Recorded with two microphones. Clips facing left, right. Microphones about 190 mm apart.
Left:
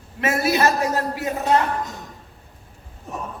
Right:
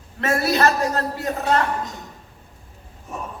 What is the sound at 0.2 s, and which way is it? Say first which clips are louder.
A man's voice: even; 15° left (ahead or behind).